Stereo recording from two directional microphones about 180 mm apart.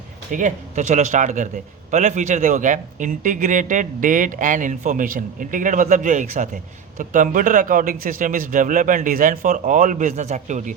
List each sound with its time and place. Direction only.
0.3 s a man's voice: 45° right (ahead or behind)